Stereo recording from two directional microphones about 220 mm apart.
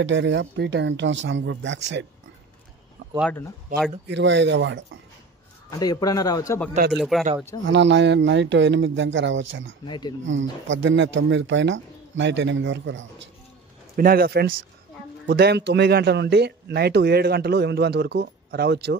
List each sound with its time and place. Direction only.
0.0 s speech: 55° right (ahead or behind)
3.2 s speech: 5° left (ahead or behind)
4.1 s speech: 55° right (ahead or behind)
5.7 s a man's voice: 15° left (ahead or behind)
6.9 s speech: centre (ahead or behind)
7.6 s speech: 50° right (ahead or behind)
9.8 s speech: 20° left (ahead or behind)
10.2 s speech: 60° right (ahead or behind)
13.9 s speech: 40° right (ahead or behind)